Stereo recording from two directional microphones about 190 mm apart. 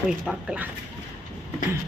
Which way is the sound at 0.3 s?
5° right (ahead or behind).